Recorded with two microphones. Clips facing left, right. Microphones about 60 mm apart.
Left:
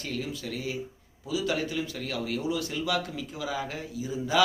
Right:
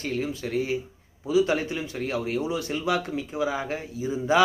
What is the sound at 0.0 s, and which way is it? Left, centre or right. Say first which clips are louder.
Speech: right 5 dB; right.